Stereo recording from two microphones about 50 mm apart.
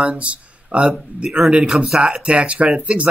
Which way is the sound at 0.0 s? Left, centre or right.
Right.